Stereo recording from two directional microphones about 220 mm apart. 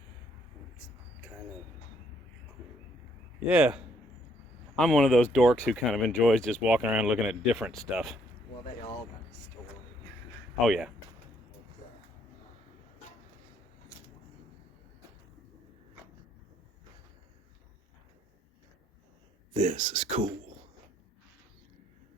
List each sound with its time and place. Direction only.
3.5 s speech: 5° right (ahead or behind)
10.7 s speech: centre (ahead or behind)
19.5 s speech: 30° right (ahead or behind)